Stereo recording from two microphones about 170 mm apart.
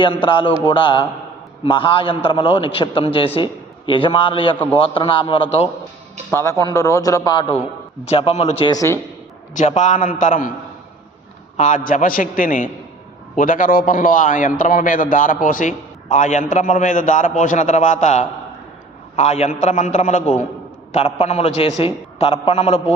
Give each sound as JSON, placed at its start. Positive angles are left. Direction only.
{"t": 0.0, "sound": "a man's voice", "side_deg": 30}
{"t": 6.3, "sound": "a man's voice", "side_deg": 20}
{"t": 8.0, "sound": "a man's voice", "side_deg": 35}
{"t": 8.7, "sound": "a man's voice", "side_deg": 20}
{"t": 9.6, "sound": "a man's voice", "side_deg": 45}
{"t": 11.5, "sound": "a man's voice", "side_deg": 45}